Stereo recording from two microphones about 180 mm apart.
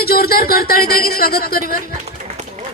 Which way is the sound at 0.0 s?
60° left (ahead or behind).